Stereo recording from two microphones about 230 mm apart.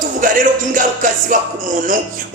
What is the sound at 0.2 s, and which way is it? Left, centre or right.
Speech, right.